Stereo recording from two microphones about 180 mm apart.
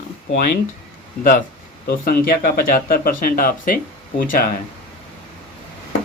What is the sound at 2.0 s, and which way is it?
Speech, 55° left (ahead or behind).